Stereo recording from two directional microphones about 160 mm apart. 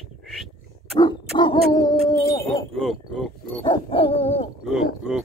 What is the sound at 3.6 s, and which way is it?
Dog, 30° left (ahead or behind).